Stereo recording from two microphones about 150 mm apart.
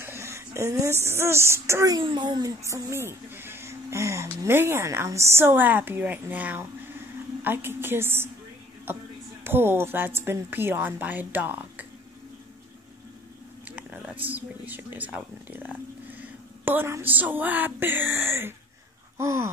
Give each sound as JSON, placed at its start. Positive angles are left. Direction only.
{"t": 0.0, "sound": "speech", "side_deg": -15}
{"t": 2.0, "sound": "speech", "side_deg": -30}
{"t": 13.7, "sound": "a sound", "side_deg": -10}
{"t": 14.2, "sound": "speech", "side_deg": -10}